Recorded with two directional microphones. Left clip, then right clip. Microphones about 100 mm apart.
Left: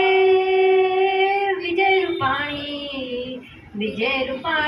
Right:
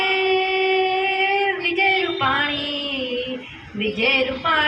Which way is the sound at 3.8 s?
15° left (ahead or behind).